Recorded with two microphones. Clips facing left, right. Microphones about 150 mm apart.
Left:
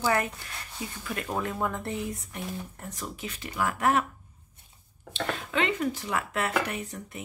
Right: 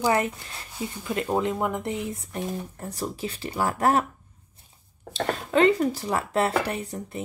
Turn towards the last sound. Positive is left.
turn(degrees=-35)  # may be behind; listen again after turning